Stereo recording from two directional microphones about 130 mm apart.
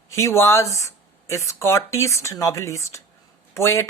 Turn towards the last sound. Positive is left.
turn(degrees=20)  # may be behind; listen again after turning